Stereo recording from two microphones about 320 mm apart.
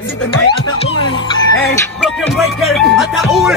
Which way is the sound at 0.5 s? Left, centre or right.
Centre.